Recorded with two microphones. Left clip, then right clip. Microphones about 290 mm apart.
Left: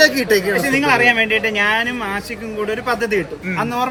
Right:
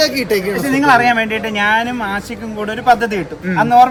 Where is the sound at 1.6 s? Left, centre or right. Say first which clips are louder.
Right 2 dB; centre.